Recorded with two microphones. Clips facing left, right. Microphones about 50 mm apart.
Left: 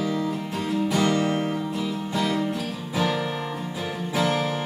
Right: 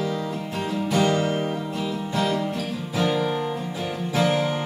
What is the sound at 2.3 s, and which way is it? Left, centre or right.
Music, centre.